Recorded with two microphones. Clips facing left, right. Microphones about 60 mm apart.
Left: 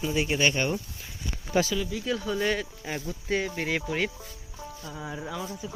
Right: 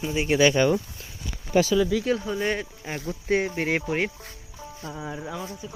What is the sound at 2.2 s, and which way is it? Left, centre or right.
Speech, centre.